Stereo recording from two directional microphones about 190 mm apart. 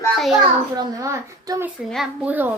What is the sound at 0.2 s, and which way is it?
Speech, centre (ahead or behind).